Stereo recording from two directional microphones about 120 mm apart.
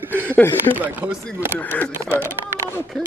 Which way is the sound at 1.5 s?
15° left (ahead or behind).